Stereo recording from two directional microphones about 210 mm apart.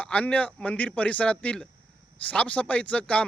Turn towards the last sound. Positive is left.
turn(degrees=5)  # may be behind; listen again after turning